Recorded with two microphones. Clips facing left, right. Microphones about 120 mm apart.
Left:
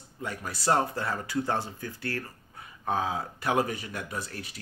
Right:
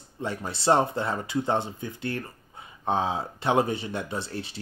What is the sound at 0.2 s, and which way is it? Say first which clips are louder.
Speech: right 4 dB; 25° right (ahead or behind).